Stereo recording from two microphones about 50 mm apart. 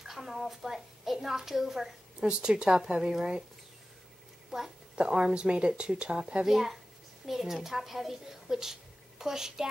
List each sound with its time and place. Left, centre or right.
0.0 s a woman's voice: centre
2.1 s a woman's voice: centre
4.5 s a woman's voice: centre
4.9 s speech: centre
6.5 s a child's voice: centre